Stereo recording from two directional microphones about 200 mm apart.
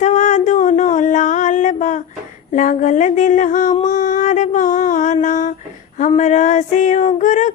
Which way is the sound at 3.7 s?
20° left (ahead or behind).